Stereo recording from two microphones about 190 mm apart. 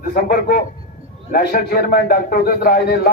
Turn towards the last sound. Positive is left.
turn(degrees=60)  # may be behind; listen again after turning